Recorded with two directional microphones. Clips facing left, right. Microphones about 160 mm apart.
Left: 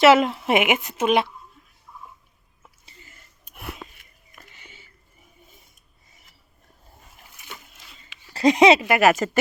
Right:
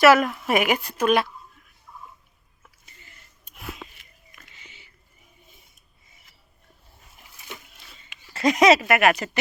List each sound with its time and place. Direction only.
0.0 s speech: 25° left (ahead or behind)
3.5 s a sound: 60° left (ahead or behind)
4.5 s biting: 50° left (ahead or behind)
8.3 s speech: 30° left (ahead or behind)